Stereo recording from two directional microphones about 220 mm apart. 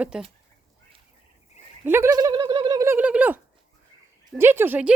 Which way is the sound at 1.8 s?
10° right (ahead or behind).